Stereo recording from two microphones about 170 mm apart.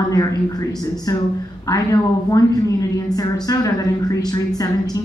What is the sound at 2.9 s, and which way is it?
A woman's voice, 20° left (ahead or behind).